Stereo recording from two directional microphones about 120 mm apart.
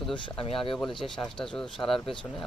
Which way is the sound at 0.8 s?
5° left (ahead or behind).